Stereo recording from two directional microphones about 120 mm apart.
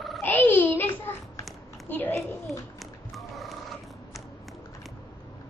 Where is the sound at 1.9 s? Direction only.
15° left (ahead or behind).